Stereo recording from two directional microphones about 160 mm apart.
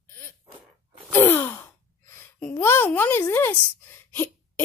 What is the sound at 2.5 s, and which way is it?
Speech, 15° left (ahead or behind).